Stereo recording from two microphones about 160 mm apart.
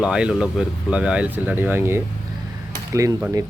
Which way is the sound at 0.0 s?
5° right (ahead or behind).